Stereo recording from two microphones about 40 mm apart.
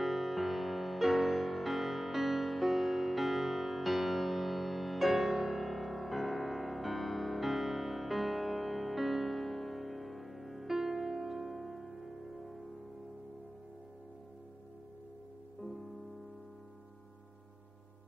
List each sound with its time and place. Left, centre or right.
0.0 s music: centre